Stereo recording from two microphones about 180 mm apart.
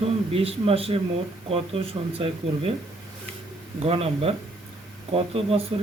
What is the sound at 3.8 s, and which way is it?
Speech, 35° right (ahead or behind).